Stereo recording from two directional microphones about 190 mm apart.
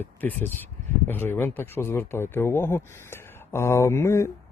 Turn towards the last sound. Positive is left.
turn(degrees=15)  # may be behind; listen again after turning